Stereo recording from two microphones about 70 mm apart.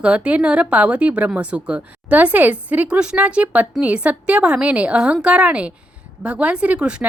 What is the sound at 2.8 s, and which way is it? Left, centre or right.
Speech, centre.